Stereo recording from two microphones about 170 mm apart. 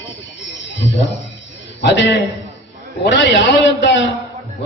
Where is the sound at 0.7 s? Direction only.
90° left.